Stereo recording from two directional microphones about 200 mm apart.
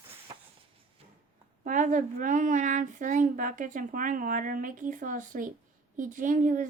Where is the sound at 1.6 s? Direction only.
40° right (ahead or behind).